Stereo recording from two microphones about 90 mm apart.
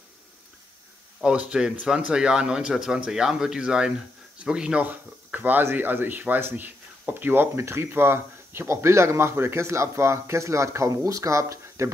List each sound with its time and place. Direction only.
1.2 s speech: 10° right (ahead or behind); by 11.9 s 30° right (ahead or behind)